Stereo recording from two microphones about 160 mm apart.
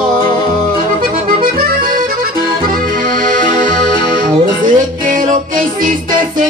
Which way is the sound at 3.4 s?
55° right (ahead or behind).